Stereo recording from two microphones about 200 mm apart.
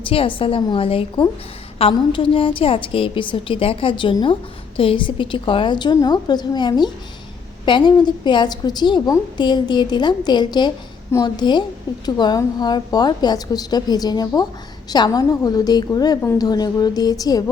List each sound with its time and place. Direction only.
0.1 s a woman's voice: 25° left (ahead or behind)